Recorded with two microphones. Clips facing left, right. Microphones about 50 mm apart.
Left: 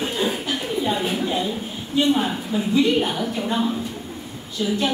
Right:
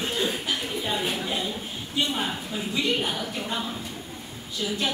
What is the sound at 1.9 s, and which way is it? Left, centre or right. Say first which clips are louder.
A woman's voice: left 8 dB; centre.